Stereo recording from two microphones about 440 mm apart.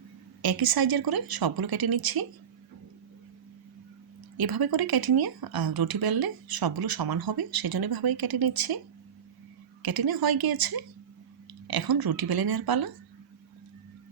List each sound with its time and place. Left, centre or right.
0.4 s speech: right
4.4 s speech: right
9.8 s speech: right